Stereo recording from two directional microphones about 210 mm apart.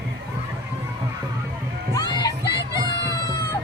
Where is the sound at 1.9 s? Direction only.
20° left (ahead or behind).